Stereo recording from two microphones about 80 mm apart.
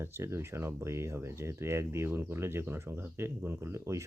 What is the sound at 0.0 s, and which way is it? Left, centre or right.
Speech, right.